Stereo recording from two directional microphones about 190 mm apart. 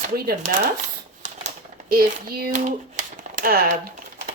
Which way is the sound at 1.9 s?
50° right (ahead or behind).